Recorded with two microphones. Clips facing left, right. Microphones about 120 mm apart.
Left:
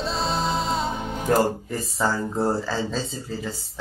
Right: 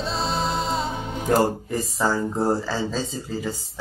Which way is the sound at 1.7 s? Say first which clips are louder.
Right 2 dB; 20° right (ahead or behind).